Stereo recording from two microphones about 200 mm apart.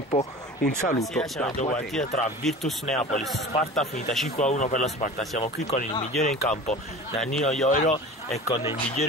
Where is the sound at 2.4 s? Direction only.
Centre (ahead or behind).